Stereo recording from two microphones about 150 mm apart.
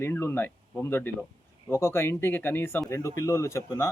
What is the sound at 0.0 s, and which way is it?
A man's voice, 15° left (ahead or behind).